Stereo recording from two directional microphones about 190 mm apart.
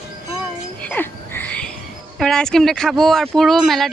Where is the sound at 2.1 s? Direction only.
5° left (ahead or behind).